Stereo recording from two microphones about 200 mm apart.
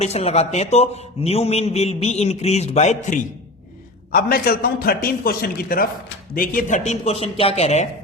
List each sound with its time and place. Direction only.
0.0 s a man's voice: 30° left (ahead or behind)
4.1 s a man's voice: 50° left (ahead or behind); by 7.9 s 30° left (ahead or behind)